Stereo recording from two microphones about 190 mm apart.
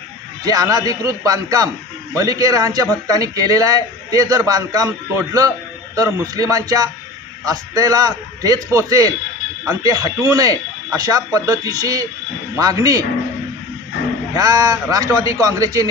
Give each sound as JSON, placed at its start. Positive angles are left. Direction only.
{"t": 0.4, "sound": "speech", "side_deg": -20}
{"t": 14.3, "sound": "speech", "side_deg": -20}